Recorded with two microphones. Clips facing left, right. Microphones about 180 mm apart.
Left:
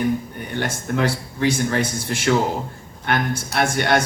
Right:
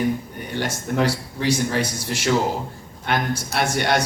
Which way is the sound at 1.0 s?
55° left (ahead or behind).